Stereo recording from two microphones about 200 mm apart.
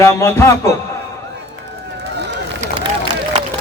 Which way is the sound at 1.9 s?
60° right (ahead or behind).